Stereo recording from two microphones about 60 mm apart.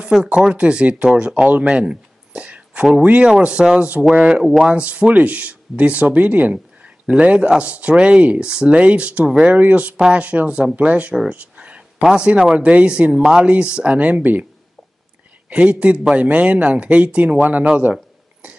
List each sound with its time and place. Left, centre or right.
0.2 s speech: centre
11.1 s a sound: centre
12.1 s speech: centre
13.9 s speech: right
15.5 s speech: centre